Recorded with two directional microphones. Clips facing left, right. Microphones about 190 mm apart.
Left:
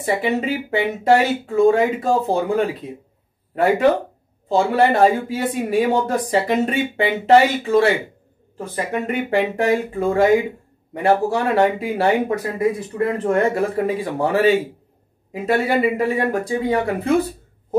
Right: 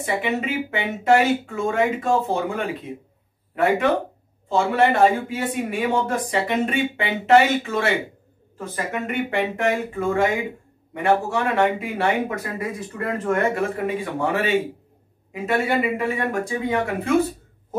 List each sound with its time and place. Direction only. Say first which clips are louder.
0.0 s speech: left 4 dB; 35° left (ahead or behind)